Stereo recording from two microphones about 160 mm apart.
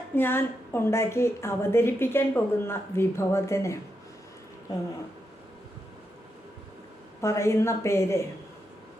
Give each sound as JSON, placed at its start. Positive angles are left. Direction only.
{"t": 0.2, "sound": "a woman's voice", "side_deg": 15}
{"t": 7.2, "sound": "a woman's voice", "side_deg": 20}